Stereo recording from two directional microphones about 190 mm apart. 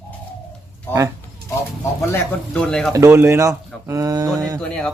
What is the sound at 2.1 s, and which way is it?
Speech, 5° left (ahead or behind).